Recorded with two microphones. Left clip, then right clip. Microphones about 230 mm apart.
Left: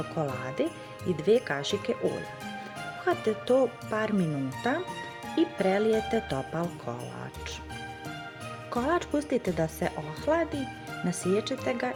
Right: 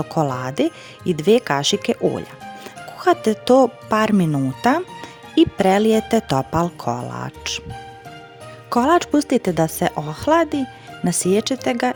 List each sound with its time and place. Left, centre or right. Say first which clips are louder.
0.1 s speech: right 11 dB; right
3.0 s speech: right 11 dB; right
8.7 s speech: right 12 dB; right